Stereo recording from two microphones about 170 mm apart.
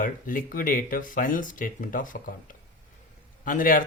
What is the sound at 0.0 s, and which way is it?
Speech, 55° left (ahead or behind).